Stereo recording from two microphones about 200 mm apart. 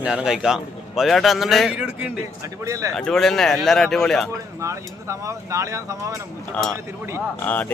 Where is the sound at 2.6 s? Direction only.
15° right (ahead or behind).